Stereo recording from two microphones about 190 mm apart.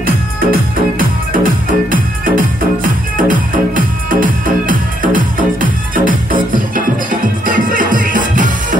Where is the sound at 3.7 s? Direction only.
45° right (ahead or behind).